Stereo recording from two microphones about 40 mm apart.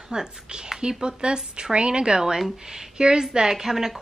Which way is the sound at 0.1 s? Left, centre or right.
Centre.